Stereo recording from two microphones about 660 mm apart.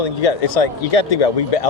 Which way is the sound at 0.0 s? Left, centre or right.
Left.